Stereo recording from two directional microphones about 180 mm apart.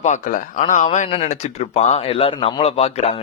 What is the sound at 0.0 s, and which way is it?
A man's voice, 45° left (ahead or behind).